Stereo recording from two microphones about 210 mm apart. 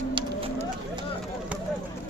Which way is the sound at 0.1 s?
20° right (ahead or behind).